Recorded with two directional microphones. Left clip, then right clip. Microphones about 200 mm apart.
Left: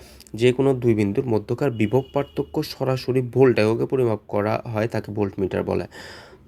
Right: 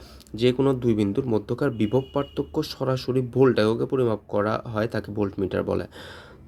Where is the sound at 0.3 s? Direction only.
10° left (ahead or behind).